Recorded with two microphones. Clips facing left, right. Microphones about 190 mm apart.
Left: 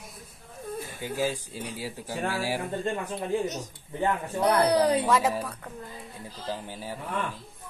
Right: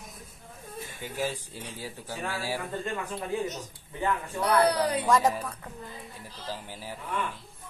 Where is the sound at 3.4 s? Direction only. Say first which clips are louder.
Left 2 dB; 40° left (ahead or behind).